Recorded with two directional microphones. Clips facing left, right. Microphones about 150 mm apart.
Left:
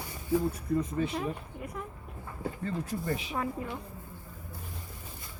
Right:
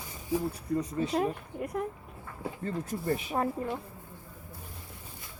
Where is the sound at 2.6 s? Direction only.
50° right (ahead or behind).